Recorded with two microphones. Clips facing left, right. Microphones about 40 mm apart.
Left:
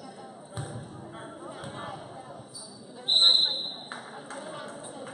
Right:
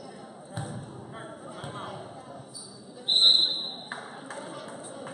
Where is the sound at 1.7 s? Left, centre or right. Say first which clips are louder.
Right 1 dB; centre.